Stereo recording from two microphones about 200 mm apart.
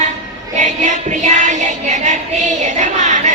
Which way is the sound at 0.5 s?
35° right (ahead or behind).